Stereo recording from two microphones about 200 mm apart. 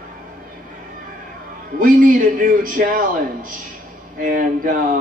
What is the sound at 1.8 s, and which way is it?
A man's voice, 45° right (ahead or behind).